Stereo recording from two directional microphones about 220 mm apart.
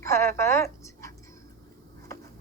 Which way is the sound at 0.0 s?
10° left (ahead or behind).